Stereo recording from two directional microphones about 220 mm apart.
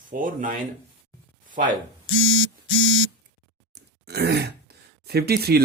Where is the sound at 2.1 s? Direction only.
60° left (ahead or behind).